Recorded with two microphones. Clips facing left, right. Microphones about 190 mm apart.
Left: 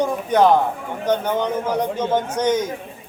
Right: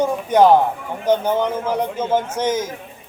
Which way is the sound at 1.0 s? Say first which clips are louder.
Right 3 dB; 10° right (ahead or behind).